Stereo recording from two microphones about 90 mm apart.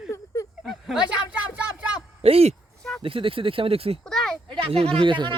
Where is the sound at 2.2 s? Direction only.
90° right.